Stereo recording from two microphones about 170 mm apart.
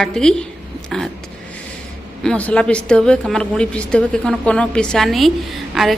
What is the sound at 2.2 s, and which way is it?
A woman's voice, 5° left (ahead or behind).